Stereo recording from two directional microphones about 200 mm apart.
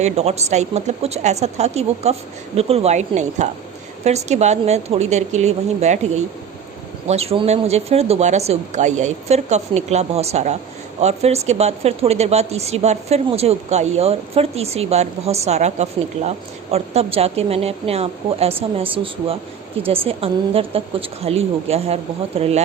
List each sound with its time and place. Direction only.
0.0 s speech: 35° right (ahead or behind)
7.1 s speech: 30° right (ahead or behind)
19.9 s a woman's voice: 30° right (ahead or behind)